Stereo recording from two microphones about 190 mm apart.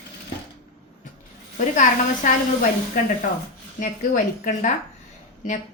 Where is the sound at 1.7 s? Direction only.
40° left (ahead or behind).